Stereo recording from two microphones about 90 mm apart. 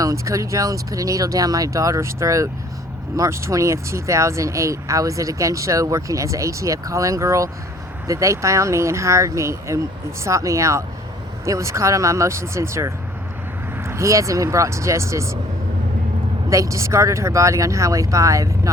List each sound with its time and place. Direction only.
0.0 s speech: 40° right (ahead or behind)
16.5 s speech: 35° right (ahead or behind)